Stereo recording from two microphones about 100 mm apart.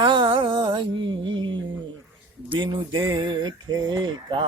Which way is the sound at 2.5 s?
50° right (ahead or behind).